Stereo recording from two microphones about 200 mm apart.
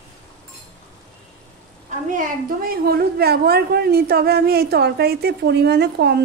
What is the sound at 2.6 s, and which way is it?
A woman's voice, 50° right (ahead or behind).